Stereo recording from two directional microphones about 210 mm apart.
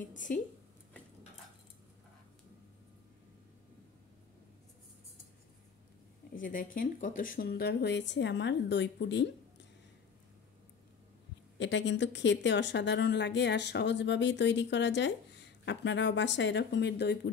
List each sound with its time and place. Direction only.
0.0 s speech: 40° left (ahead or behind)
6.3 s speech: 40° left (ahead or behind); by 9.7 s 55° left (ahead or behind)
11.5 s speech: 60° left (ahead or behind)